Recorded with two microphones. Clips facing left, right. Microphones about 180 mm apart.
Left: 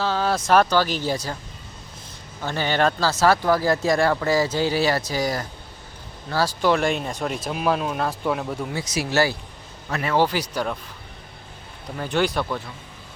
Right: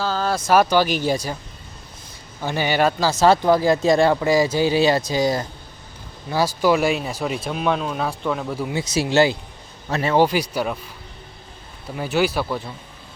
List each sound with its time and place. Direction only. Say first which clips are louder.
0.0 s speech: even; centre (ahead or behind)
2.4 s speech: right 2 dB; 10° right (ahead or behind)
6.3 s speech: right 2 dB; 10° right (ahead or behind)
8.7 s speech: right 5 dB; 25° right (ahead or behind); by 10.8 s 10° right (ahead or behind)
11.9 s speech: right 2 dB; 5° right (ahead or behind)